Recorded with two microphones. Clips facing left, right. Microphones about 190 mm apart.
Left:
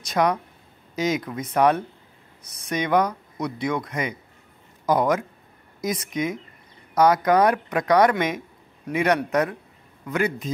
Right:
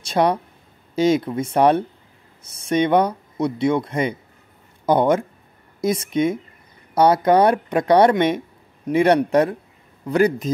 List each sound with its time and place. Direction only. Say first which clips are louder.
0.0 s speech: right 3 dB; 30° right (ahead or behind)